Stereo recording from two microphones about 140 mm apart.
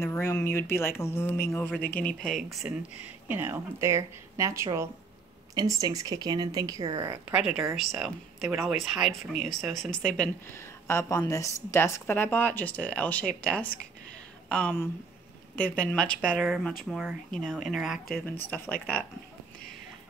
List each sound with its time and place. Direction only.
0.0 s speech: 15° left (ahead or behind); by 2.7 s centre (ahead or behind)
3.3 s speech: 15° right (ahead or behind)
7.0 s speech: 15° right (ahead or behind); by 10.3 s 5° left (ahead or behind)
10.5 s speech: 20° left (ahead or behind); by 18.0 s 5° right (ahead or behind)
18.4 s speech: 10° left (ahead or behind)